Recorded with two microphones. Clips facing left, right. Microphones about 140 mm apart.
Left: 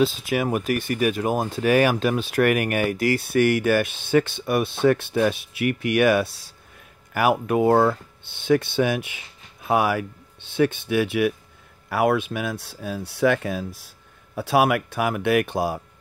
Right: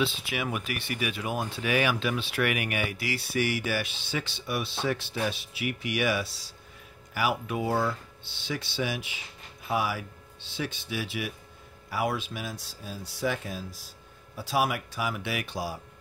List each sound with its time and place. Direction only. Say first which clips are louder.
0.0 s speech: left 8 dB; 40° left (ahead or behind)